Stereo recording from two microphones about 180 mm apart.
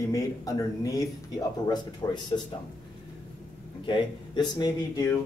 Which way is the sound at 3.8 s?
25° left (ahead or behind).